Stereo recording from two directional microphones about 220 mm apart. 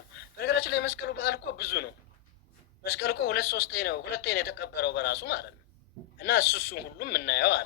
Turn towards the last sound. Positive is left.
turn(degrees=45)  # may be behind; listen again after turning